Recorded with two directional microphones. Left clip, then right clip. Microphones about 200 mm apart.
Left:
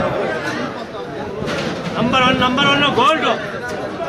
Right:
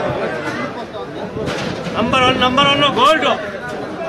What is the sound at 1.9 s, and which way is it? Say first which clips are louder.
Speech: right 1 dB; 45° right (ahead or behind).